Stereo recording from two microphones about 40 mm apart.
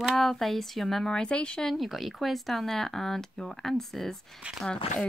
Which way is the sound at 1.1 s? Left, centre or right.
Left.